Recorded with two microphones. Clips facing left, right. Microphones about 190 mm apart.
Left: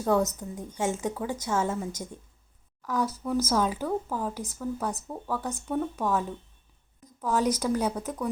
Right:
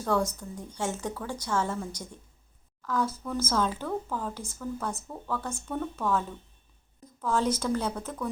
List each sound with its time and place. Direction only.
0.0 s a woman's voice: 20° left (ahead or behind)